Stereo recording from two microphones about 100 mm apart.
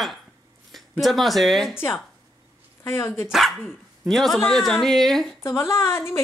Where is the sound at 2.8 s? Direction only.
25° left (ahead or behind).